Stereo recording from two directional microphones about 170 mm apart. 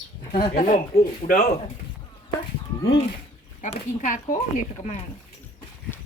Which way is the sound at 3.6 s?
50° left (ahead or behind).